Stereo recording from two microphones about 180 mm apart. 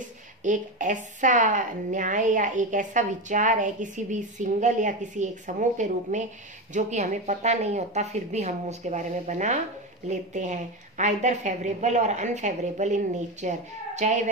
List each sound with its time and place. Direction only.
0.4 s a woman's voice: 45° right (ahead or behind)